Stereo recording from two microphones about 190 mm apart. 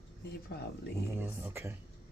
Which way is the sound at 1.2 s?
10° right (ahead or behind).